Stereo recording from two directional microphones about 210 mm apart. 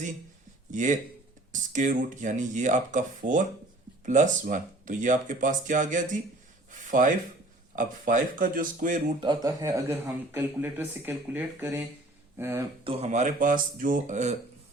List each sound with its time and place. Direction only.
0.7 s speech: 35° right (ahead or behind)
6.7 s a sound: 40° right (ahead or behind)
7.8 s speech: 40° right (ahead or behind)
9.2 s speech: 20° right (ahead or behind)
12.8 s speech: 30° right (ahead or behind)